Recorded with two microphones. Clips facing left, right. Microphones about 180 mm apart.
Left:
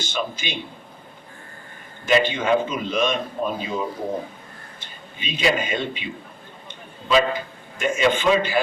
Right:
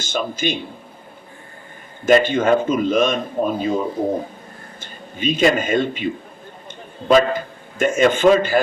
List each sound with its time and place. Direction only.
0.0 s a man's voice: 45° right (ahead or behind)
2.0 s a man's voice: 50° right (ahead or behind)
7.1 s a man's voice: 50° right (ahead or behind)